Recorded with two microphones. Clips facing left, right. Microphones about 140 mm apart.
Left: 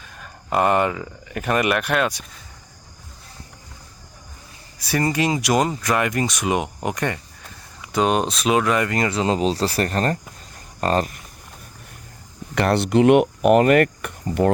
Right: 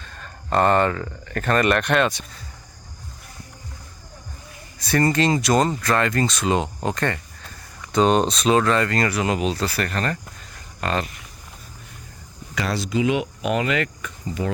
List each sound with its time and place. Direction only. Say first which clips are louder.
0.0 s speech: right 1 dB; 10° left (ahead or behind)
4.8 s speech: right 2 dB; 10° left (ahead or behind); by 11.2 s 40° left (ahead or behind)
12.5 s speech: left 6 dB; 60° left (ahead or behind)